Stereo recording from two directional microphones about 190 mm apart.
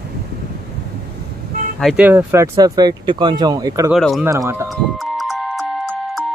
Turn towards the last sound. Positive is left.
turn(degrees=0)  # may be behind; listen again after turning